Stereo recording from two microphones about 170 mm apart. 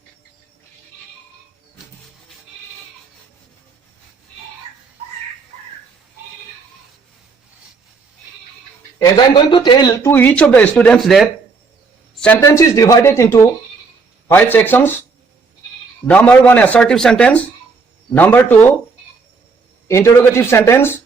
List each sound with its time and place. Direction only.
9.0 s a man's voice: 25° left (ahead or behind)
10.1 s a man's voice: 10° left (ahead or behind)
12.4 s a man's voice: 20° left (ahead or behind)
16.0 s a man's voice: 10° left (ahead or behind)
19.9 s a man's voice: 15° left (ahead or behind)